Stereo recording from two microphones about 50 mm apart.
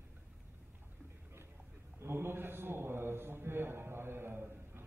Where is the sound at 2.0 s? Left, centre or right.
Right.